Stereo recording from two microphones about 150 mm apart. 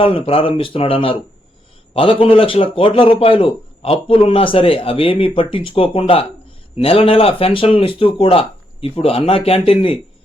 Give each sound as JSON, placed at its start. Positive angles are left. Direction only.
{"t": 0.0, "sound": "a man's voice", "side_deg": 35}